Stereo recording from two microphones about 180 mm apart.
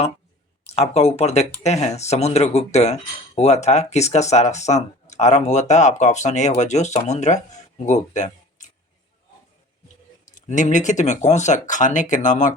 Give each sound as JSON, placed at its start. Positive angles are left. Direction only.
{"t": 0.7, "sound": "speech", "side_deg": 35}
{"t": 10.3, "sound": "speech", "side_deg": 45}